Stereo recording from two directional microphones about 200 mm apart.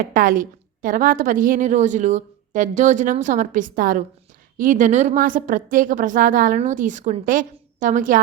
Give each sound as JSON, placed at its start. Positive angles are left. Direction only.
{"t": 0.0, "sound": "a woman's voice", "side_deg": -45}